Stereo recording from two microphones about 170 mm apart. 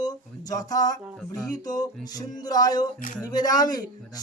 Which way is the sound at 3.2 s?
20° left (ahead or behind).